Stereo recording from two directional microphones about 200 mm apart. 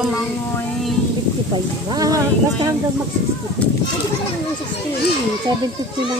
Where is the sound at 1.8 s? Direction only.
20° right (ahead or behind).